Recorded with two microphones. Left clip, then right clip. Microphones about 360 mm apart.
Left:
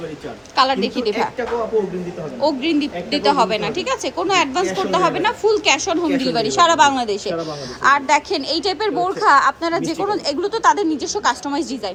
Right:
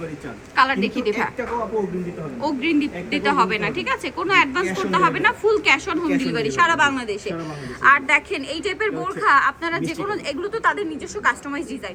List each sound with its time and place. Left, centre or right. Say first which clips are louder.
0.5 s a woman's voice: left 2 dB; centre
2.4 s a woman's voice: left 3 dB; centre
4.9 s a woman's voice: right 2 dB; centre
7.0 s speech: left 6 dB; left
7.8 s a woman's voice: left 1 dB; centre